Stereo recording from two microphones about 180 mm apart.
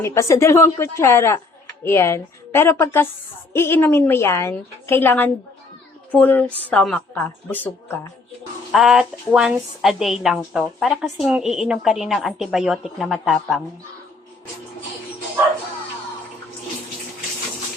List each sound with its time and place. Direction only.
0.0 s speech: 15° left (ahead or behind)
8.7 s a woman's voice: centre (ahead or behind)